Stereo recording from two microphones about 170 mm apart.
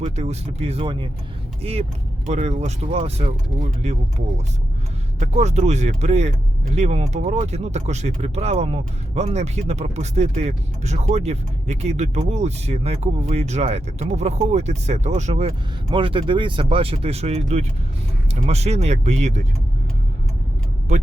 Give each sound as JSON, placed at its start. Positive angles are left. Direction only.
{"t": 0.0, "sound": "speech", "side_deg": -40}
{"t": 2.2, "sound": "speech", "side_deg": -45}
{"t": 5.2, "sound": "speech", "side_deg": -40}